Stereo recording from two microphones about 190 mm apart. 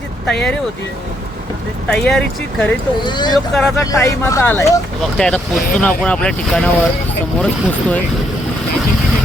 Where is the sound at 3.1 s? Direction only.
25° left (ahead or behind).